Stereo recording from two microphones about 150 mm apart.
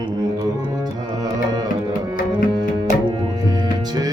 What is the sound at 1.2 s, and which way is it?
Music, 25° right (ahead or behind).